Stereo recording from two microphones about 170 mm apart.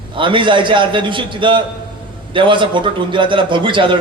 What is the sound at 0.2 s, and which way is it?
A man's voice, 30° right (ahead or behind).